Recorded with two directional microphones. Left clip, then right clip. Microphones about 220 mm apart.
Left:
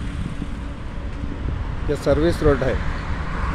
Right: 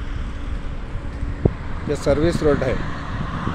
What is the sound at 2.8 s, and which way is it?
Vehicle, 25° left (ahead or behind).